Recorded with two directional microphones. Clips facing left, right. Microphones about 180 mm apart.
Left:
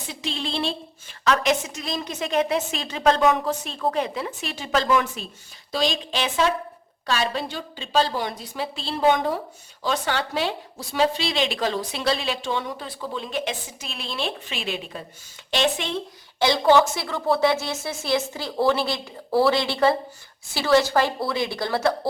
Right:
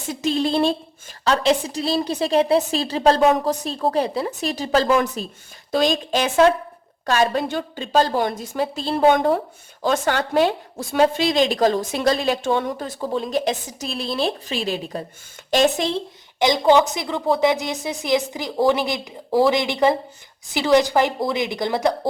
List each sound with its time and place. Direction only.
0.1 s a woman's voice: 45° right (ahead or behind)
1.2 s a woman's voice: 30° right (ahead or behind)
16.4 s speech: 15° right (ahead or behind)